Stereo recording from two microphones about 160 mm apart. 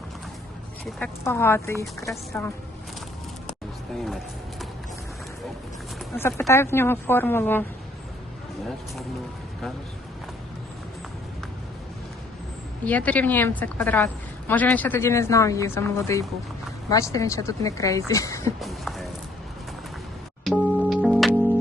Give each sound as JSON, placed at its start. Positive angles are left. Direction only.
{"t": 1.2, "sound": "a woman's voice", "side_deg": 15}
{"t": 6.1, "sound": "a woman's voice", "side_deg": 15}
{"t": 12.8, "sound": "a woman's voice", "side_deg": 10}
{"t": 18.6, "sound": "speech", "side_deg": 0}
{"t": 20.4, "sound": "music", "side_deg": 0}